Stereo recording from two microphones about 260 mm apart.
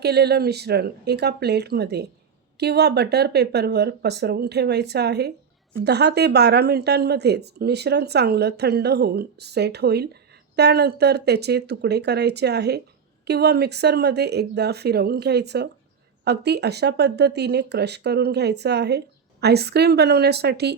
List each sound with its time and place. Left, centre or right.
0.0 s speech: right